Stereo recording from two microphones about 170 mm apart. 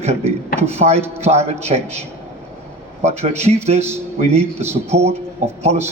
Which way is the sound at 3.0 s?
40° right (ahead or behind).